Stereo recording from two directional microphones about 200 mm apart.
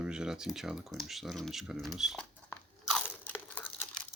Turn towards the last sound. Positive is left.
turn(degrees=10)  # may be behind; listen again after turning